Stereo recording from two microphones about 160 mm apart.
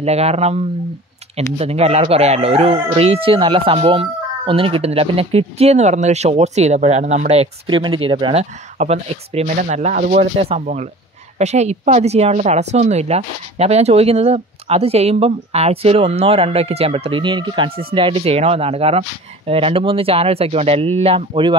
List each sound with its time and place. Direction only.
0.0 s a woman's voice: 40° right (ahead or behind)
7.6 s a woman's voice: 30° right (ahead or behind)